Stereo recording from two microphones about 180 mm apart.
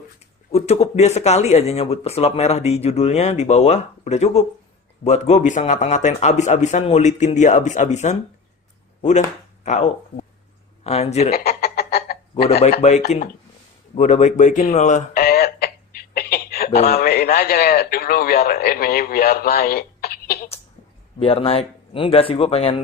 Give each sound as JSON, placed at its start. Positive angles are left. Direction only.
{"t": 0.5, "sound": "speech", "side_deg": 35}
{"t": 11.3, "sound": "a sound", "side_deg": 60}
{"t": 13.1, "sound": "speech", "side_deg": 45}
{"t": 13.9, "sound": "a sound", "side_deg": 40}
{"t": 16.8, "sound": "a man's voice", "side_deg": 55}
{"t": 21.2, "sound": "speech", "side_deg": 35}